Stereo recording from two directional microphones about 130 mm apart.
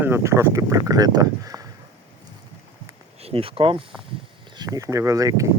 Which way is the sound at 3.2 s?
50° right (ahead or behind).